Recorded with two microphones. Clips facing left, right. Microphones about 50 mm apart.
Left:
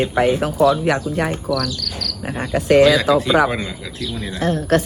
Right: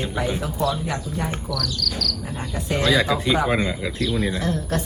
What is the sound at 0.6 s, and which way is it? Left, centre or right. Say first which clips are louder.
Speech: left 10 dB; left.